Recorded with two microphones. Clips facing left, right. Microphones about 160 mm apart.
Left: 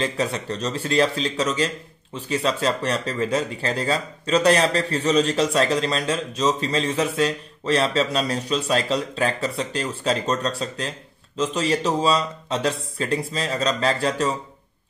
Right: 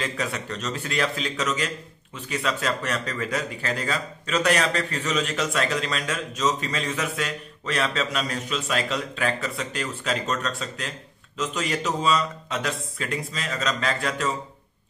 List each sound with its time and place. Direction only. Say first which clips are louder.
0.0 s speech: left 5 dB; 30° left (ahead or behind)